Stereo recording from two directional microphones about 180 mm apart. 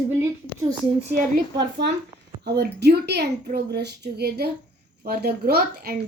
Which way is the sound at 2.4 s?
65° right (ahead or behind).